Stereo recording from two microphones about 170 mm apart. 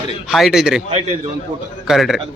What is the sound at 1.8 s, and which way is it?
Speech, centre (ahead or behind).